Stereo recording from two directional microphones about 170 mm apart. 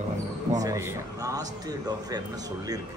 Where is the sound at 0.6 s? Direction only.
20° right (ahead or behind).